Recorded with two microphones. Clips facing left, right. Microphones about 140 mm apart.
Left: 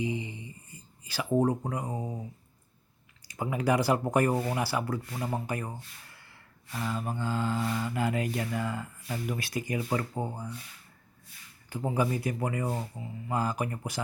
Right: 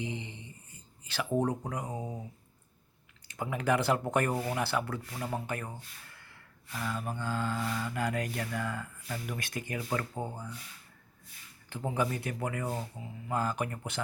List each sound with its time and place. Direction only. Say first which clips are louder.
0.0 s a sound: left 6 dB; 65° right (ahead or behind)
0.3 s a sound: left 5 dB; 10° left (ahead or behind)
1.1 s speech: left 4 dB; 10° left (ahead or behind)
1.9 s speech: left 3 dB; 10° right (ahead or behind)
3.2 s speech: left 2 dB; 10° left (ahead or behind)
6.8 s speech: left 3 dB; 10° left (ahead or behind)
8.4 s speech: left 3 dB; 15° left (ahead or behind)
11.7 s speech: left 3 dB; 10° left (ahead or behind)